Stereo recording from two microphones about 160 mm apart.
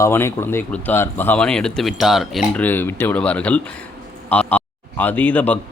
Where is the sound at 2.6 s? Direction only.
10° left (ahead or behind).